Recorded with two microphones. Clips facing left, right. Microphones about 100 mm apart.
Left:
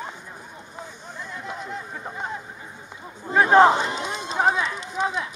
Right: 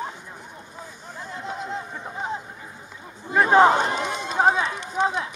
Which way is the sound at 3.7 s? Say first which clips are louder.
Right 2 dB; 55° right (ahead or behind).